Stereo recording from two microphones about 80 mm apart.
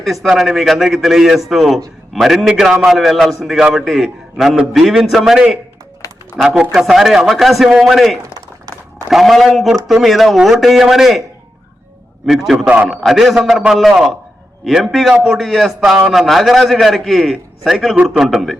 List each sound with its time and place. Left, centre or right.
0.0 s a man's voice: centre
6.0 s a sound: left
6.7 s a man's voice: centre
12.2 s a man's voice: centre
12.6 s a man's voice: centre
12.9 s a man's voice: centre